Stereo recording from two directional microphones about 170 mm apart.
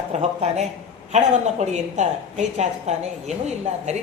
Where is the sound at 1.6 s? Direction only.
40° right (ahead or behind).